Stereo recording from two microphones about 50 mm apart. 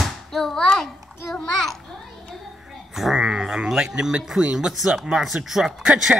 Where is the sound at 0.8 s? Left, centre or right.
Centre.